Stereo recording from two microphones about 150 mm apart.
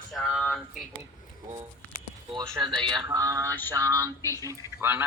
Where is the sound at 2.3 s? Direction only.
25° right (ahead or behind).